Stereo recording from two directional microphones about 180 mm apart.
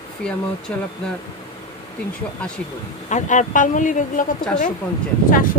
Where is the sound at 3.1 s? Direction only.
40° left (ahead or behind).